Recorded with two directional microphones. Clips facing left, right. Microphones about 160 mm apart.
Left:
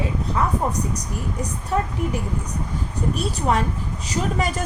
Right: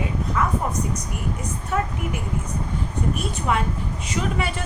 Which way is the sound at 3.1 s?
35° left (ahead or behind).